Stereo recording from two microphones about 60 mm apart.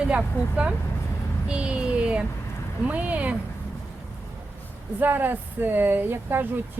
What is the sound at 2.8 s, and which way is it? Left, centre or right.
Speech, right.